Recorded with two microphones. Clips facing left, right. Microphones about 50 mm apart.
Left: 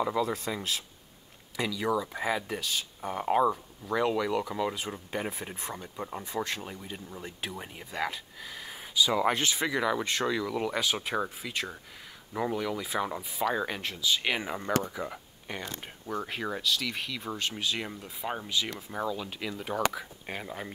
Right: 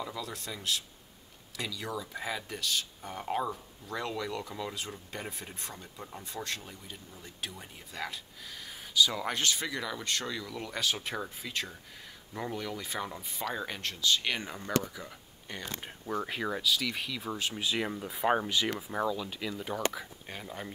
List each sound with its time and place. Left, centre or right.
0.0 s speech: left; by 3.3 s centre
3.8 s speech: left
11.2 s speech: centre
16.1 s speech: centre; by 18.7 s right
18.7 s speech: centre
19.1 s speech: centre
20.2 s speech: left